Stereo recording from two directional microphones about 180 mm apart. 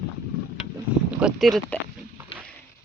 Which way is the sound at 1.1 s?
Centre (ahead or behind).